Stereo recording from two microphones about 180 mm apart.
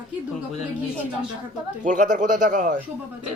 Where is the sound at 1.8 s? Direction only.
45° right (ahead or behind).